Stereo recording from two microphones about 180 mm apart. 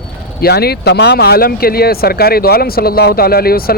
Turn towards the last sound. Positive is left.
turn(degrees=55)  # may be behind; listen again after turning